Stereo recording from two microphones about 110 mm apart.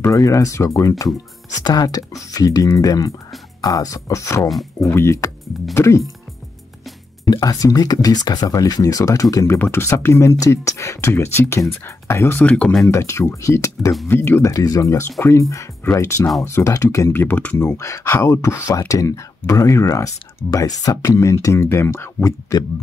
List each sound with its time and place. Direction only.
0.0 s speech: 30° left (ahead or behind)
4.4 s speech: centre (ahead or behind)
4.7 s speech: 25° left (ahead or behind)
7.2 s speech: 35° left (ahead or behind); by 12.8 s 10° left (ahead or behind)
12.8 s speech: 25° left (ahead or behind)
14.5 s speech: 35° left (ahead or behind); by 17.6 s 15° left (ahead or behind)
17.6 s speech: 25° left (ahead or behind)